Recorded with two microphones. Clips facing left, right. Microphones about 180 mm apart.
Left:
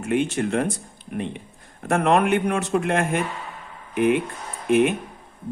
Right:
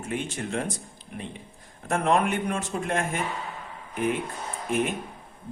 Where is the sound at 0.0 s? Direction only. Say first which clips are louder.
Left 9 dB; 65° left (ahead or behind).